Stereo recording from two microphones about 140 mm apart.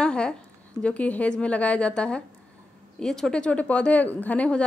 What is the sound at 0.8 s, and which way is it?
A woman's voice, 10° left (ahead or behind).